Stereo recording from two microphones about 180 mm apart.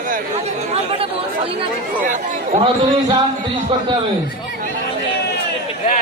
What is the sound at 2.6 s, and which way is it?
Speech, 25° right (ahead or behind).